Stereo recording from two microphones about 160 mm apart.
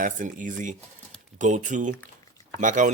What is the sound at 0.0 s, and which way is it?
Speech, 55° right (ahead or behind).